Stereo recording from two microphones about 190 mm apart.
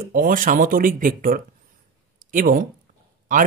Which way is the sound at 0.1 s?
45° right (ahead or behind).